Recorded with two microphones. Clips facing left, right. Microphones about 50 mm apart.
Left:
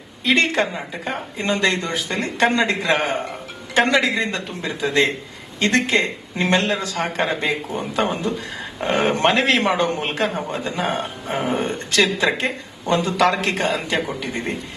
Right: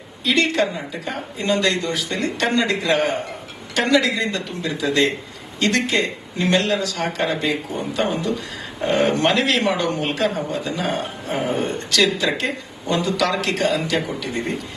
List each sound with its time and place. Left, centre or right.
0.3 s speech: left